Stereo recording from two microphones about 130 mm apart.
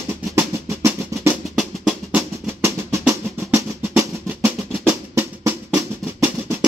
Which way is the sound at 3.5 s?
20° right (ahead or behind).